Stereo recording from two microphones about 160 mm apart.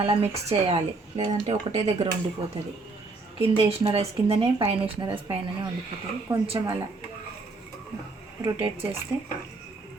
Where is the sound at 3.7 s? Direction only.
40° right (ahead or behind).